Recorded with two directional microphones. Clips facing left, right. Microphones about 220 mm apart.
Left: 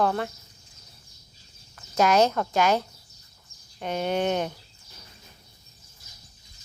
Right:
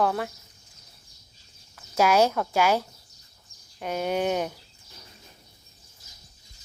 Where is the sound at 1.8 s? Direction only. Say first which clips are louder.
Even; 10° right (ahead or behind).